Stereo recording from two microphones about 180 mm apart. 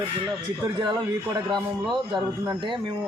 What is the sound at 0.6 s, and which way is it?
A man's voice, 20° right (ahead or behind).